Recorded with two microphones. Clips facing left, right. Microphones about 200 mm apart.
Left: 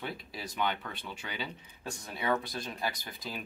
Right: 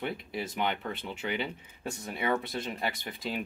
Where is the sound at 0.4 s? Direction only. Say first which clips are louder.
Right 2 dB; 20° right (ahead or behind).